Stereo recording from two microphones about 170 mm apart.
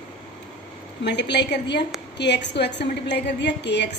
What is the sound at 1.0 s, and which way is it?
A woman's voice, 90° left.